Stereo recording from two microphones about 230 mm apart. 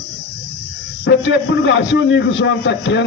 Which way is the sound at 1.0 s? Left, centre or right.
Left.